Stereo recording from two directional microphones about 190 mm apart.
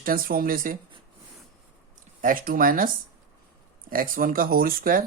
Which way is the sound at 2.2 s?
50° right (ahead or behind).